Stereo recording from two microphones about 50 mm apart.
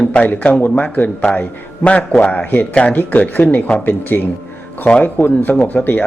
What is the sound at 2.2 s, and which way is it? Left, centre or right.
A man's voice, left.